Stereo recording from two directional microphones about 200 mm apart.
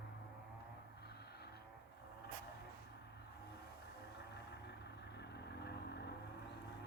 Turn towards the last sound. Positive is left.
turn(degrees=55)  # may be behind; listen again after turning